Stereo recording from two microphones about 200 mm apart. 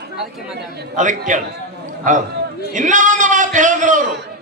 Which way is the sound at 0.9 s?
40° right (ahead or behind).